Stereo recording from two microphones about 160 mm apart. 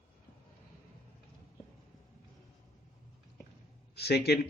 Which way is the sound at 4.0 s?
90° left.